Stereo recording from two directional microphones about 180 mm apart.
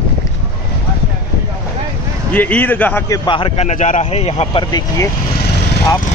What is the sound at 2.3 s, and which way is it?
Speech, 10° left (ahead or behind).